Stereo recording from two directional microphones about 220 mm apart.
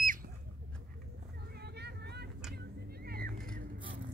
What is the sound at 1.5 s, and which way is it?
Vehicle, 50° right (ahead or behind).